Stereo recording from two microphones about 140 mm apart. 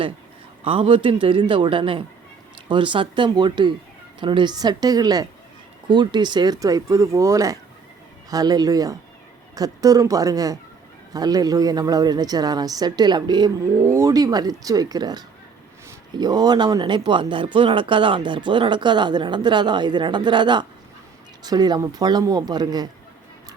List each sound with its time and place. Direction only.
0.6 s a woman's voice: 40° right (ahead or behind)